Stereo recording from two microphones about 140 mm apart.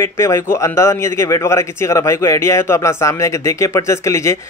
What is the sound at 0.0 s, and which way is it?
A man's voice, 20° left (ahead or behind).